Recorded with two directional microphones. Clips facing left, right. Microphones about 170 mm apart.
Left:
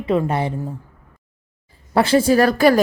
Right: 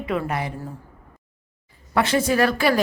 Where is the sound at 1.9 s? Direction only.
30° left (ahead or behind).